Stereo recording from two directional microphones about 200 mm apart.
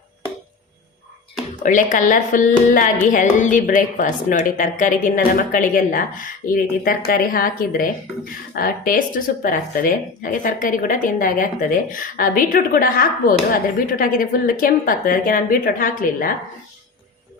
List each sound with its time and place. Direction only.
1.6 s a woman's voice: 40° left (ahead or behind)